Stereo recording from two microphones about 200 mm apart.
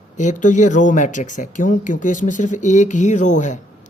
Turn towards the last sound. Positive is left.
turn(degrees=35)  # may be behind; listen again after turning